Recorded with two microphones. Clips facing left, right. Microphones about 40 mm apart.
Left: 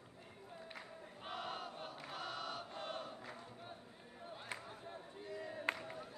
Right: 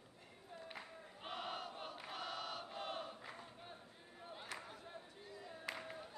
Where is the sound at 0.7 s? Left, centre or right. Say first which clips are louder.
Left 1 dB; centre.